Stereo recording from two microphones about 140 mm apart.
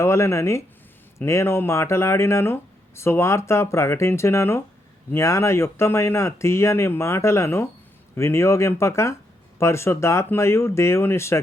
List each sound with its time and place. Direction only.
0.0 s speech: 20° left (ahead or behind)